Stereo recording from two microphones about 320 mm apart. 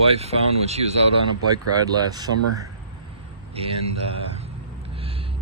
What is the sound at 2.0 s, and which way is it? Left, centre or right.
Speech, centre.